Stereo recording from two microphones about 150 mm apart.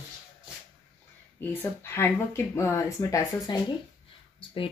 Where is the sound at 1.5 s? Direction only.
15° left (ahead or behind).